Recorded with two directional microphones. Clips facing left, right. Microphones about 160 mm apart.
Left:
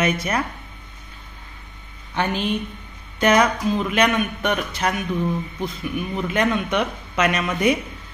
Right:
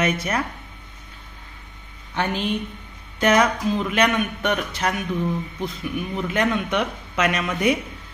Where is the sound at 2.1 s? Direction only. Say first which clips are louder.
Left 1 dB; 20° left (ahead or behind).